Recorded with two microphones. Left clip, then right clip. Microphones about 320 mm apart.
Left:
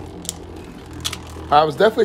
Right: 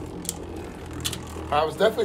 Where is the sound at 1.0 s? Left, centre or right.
Centre.